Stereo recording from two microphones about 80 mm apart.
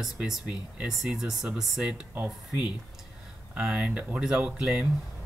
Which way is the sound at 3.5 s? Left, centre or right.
Centre.